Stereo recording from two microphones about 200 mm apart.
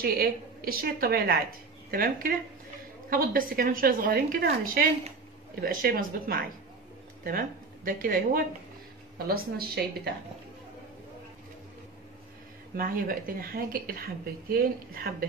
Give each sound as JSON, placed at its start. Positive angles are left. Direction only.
{"t": 0.0, "sound": "a woman's voice", "side_deg": -50}
{"t": 12.7, "sound": "a woman's voice", "side_deg": -45}